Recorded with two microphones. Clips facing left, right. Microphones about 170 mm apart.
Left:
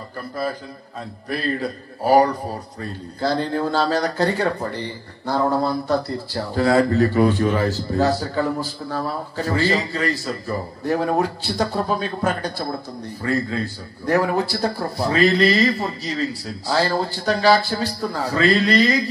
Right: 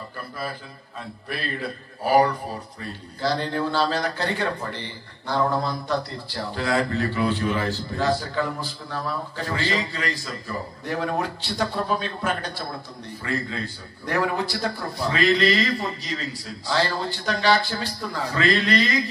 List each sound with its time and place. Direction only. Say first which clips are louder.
1.3 s a man's voice: left 6 dB; 40° left (ahead or behind)